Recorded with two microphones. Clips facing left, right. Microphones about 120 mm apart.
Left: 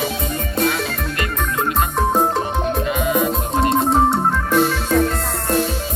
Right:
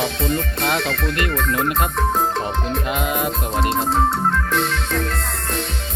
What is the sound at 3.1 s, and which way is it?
Music, centre (ahead or behind).